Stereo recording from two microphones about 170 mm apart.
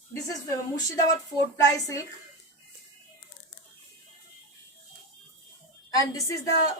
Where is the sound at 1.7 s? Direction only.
20° left (ahead or behind).